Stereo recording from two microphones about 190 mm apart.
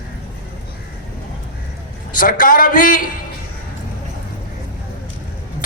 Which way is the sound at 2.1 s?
45° left (ahead or behind).